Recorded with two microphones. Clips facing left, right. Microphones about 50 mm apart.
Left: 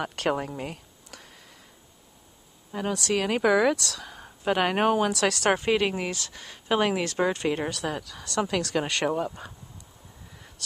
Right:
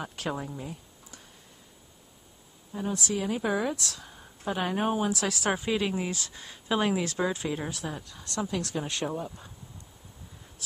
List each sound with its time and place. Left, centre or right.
0.0 s a sound: left
2.7 s speech: left
5.5 s speech: left